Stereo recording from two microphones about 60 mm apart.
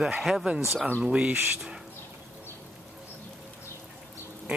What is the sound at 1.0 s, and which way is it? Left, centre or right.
Speech, centre.